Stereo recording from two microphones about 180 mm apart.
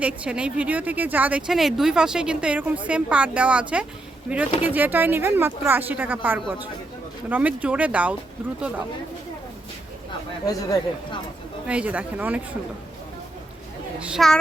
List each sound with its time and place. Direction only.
0.0 s speech: 5° right (ahead or behind)
10.4 s speech: 20° left (ahead or behind)
11.7 s speech: 10° right (ahead or behind)
14.0 s a child's voice: centre (ahead or behind)